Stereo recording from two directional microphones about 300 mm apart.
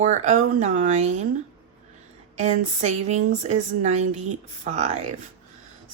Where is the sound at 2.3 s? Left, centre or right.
Right.